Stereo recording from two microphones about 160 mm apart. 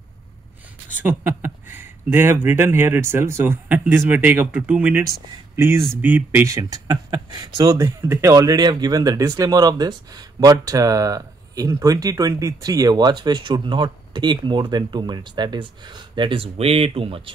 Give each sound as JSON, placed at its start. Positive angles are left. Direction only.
{"t": 0.9, "sound": "speech", "side_deg": -10}